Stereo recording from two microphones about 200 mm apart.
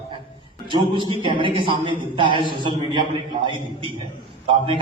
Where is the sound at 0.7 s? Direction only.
25° right (ahead or behind).